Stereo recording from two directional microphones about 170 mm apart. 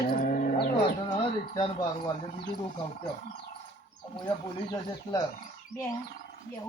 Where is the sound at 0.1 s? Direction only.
55° left (ahead or behind).